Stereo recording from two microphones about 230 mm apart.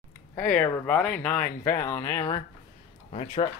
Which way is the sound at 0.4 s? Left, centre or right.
Centre.